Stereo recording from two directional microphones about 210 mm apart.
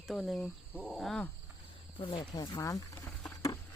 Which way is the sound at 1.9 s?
25° left (ahead or behind).